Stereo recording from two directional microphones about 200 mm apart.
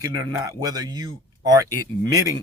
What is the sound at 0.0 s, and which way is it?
Speech, 15° right (ahead or behind).